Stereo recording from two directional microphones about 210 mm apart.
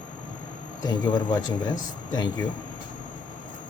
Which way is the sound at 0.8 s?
20° left (ahead or behind).